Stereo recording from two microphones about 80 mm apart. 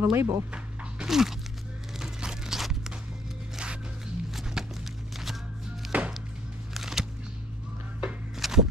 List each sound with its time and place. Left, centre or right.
0.0 s speech: right
0.5 s a sound: centre
3.5 s music: centre
5.9 s chopping: centre
6.7 s a sound: centre
8.0 s music: centre